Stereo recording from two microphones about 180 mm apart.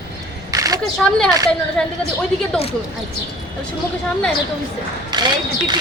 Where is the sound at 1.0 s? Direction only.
5° left (ahead or behind).